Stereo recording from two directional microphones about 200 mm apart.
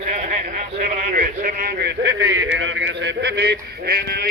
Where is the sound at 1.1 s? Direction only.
45° right (ahead or behind).